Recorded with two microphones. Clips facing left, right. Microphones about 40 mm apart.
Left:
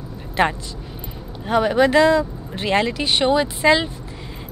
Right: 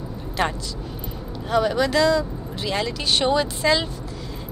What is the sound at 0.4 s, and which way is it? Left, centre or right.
Speech, left.